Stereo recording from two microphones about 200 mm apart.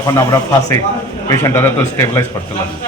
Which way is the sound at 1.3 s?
15° left (ahead or behind).